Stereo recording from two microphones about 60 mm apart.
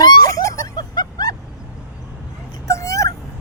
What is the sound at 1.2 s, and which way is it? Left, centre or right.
Vehicle, left.